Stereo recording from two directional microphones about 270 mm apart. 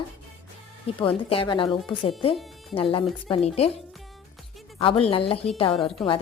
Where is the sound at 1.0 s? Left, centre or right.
Centre.